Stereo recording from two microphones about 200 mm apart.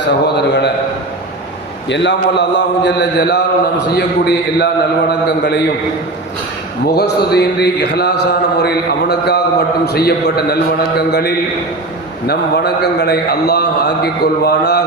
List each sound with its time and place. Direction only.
0.3 s mantra: 55° left (ahead or behind)
1.9 s mantra: 60° left (ahead or behind)
6.8 s mantra: 55° left (ahead or behind)